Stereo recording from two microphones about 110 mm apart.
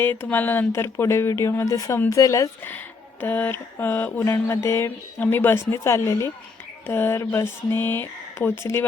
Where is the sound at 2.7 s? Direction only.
15° left (ahead or behind).